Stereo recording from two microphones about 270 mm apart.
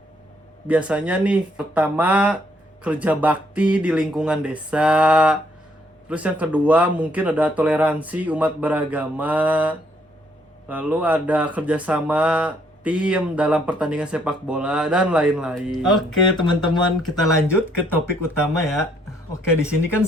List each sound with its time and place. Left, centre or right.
0.7 s speech: centre
16.4 s speech: centre
18.2 s speech: centre